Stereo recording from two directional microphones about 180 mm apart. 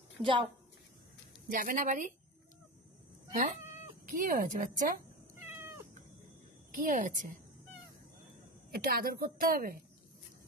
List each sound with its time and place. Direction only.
0.2 s a woman's voice: 25° right (ahead or behind)
1.5 s a woman's voice: 45° right (ahead or behind)
4.0 s a woman's voice: 50° right (ahead or behind)
6.7 s a woman's voice: 50° right (ahead or behind)
8.7 s a woman's voice: 55° right (ahead or behind)